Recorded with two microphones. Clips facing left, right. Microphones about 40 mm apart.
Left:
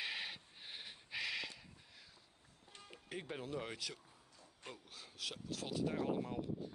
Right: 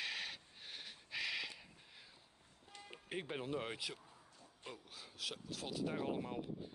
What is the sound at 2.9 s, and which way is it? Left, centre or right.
Speech, right.